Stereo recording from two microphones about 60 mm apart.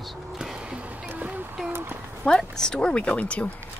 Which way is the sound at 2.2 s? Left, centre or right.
Centre.